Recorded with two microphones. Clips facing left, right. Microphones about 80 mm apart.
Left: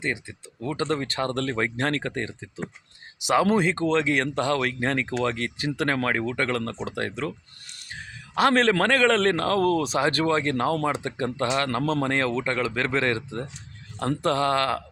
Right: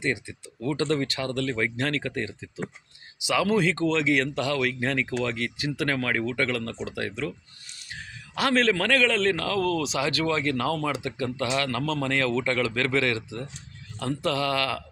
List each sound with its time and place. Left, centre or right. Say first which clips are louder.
0.0 s speech: right 1 dB; left
1.0 s speech: left 1 dB; left